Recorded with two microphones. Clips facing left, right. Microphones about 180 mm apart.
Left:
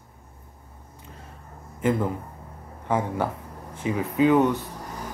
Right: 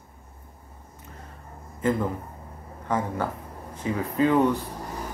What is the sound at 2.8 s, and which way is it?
Speech, 10° left (ahead or behind).